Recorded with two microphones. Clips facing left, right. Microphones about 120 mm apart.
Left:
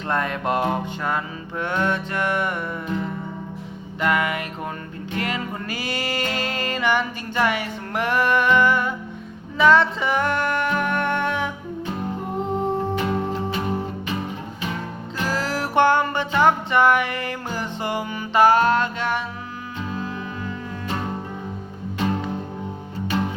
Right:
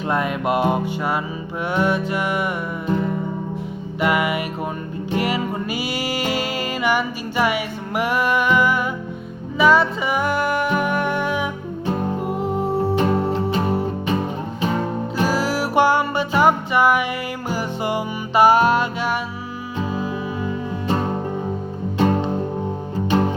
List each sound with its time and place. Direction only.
0.1 s music: 10° right (ahead or behind)
4.0 s music: 10° right (ahead or behind)
13.0 s music: 35° right (ahead or behind)
15.3 s music: 5° right (ahead or behind)
21.9 s music: 35° right (ahead or behind)